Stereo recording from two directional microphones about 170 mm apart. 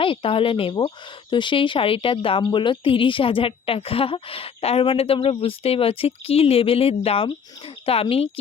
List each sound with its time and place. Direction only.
0.0 s speech: 30° left (ahead or behind)